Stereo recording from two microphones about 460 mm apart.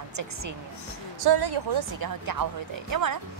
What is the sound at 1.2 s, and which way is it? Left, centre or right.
A woman's voice, right.